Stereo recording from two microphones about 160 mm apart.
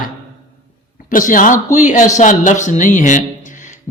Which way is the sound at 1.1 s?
55° left (ahead or behind).